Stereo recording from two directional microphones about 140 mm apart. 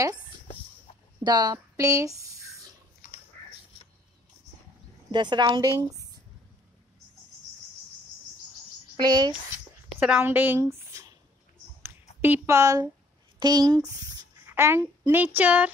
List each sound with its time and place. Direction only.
1.2 s speech: 30° right (ahead or behind)
5.1 s speech: 35° right (ahead or behind)
8.9 s speech: 30° right (ahead or behind)
9.8 s a sound: 5° right (ahead or behind)
13.4 s speech: 30° right (ahead or behind)
14.5 s speech: 15° right (ahead or behind)